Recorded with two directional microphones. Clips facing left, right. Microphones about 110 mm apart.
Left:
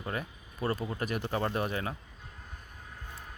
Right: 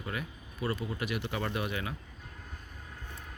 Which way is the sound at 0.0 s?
35° left (ahead or behind).